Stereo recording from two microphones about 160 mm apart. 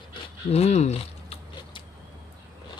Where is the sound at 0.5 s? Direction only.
45° left (ahead or behind).